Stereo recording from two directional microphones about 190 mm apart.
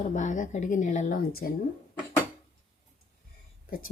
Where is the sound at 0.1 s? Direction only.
40° left (ahead or behind).